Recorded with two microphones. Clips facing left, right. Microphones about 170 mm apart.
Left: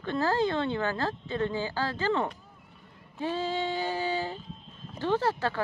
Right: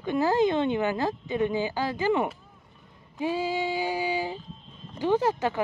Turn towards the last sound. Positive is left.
turn(degrees=-15)  # may be behind; listen again after turning